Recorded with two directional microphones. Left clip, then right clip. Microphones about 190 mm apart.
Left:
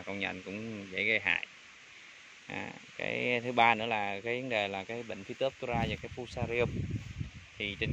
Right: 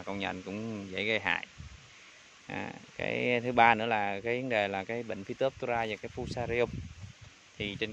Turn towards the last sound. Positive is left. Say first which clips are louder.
# even
turn(degrees=-15)  # may be behind; listen again after turning